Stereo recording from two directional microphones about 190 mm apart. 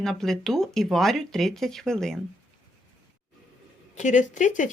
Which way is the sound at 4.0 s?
40° left (ahead or behind).